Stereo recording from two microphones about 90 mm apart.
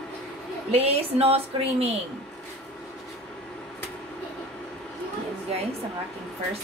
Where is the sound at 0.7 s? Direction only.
90° right.